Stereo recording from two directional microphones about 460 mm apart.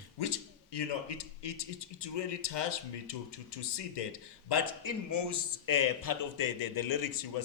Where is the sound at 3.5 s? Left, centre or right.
Left.